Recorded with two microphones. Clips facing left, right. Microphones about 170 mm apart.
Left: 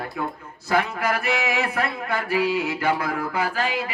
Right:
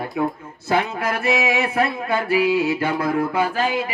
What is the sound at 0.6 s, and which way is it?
Speech, 25° right (ahead or behind).